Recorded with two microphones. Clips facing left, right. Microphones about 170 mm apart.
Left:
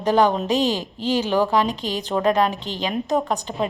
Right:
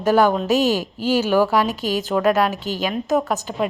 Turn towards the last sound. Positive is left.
turn(degrees=-5)  # may be behind; listen again after turning